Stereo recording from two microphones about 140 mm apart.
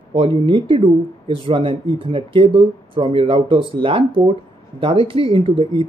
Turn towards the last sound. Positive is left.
turn(degrees=-35)  # may be behind; listen again after turning